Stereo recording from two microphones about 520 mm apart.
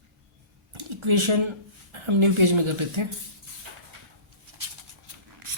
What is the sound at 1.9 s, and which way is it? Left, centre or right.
Speech, right.